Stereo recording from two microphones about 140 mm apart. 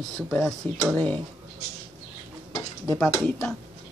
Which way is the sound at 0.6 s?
10° left (ahead or behind).